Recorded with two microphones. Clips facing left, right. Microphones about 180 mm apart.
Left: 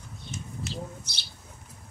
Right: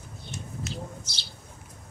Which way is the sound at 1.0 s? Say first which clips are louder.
Right 1 dB; 60° left (ahead or behind).